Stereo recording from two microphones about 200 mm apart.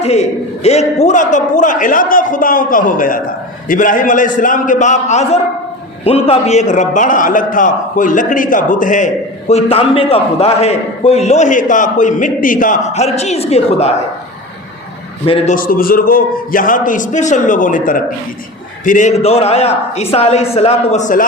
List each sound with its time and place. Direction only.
0.6 s a man's voice: 35° left (ahead or behind)
15.3 s a man's voice: 40° left (ahead or behind)